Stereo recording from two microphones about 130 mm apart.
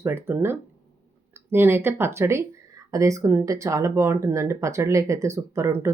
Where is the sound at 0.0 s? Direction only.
20° right (ahead or behind).